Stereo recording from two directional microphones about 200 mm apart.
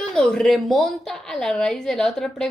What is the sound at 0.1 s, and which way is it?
A woman's voice, 5° left (ahead or behind).